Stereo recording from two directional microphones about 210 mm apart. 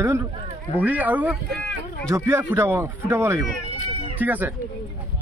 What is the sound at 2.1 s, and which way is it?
Speech, 10° right (ahead or behind).